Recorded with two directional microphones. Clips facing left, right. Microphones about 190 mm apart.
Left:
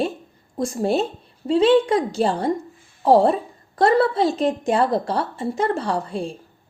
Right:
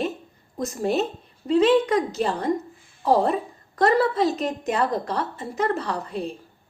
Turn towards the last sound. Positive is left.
turn(degrees=30)  # may be behind; listen again after turning